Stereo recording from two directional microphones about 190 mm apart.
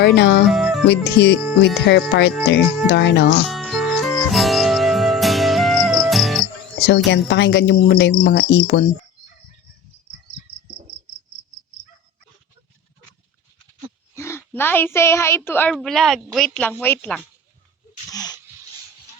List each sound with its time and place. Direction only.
0.0 s speech: 60° left (ahead or behind)
0.4 s music: centre (ahead or behind)
0.9 s speech: 60° left (ahead or behind)
3.5 s music: centre (ahead or behind)
6.7 s speech: 60° left (ahead or behind)
14.1 s a sound: 15° left (ahead or behind)
15.4 s speech: 10° left (ahead or behind)
18.1 s a sound: 20° left (ahead or behind)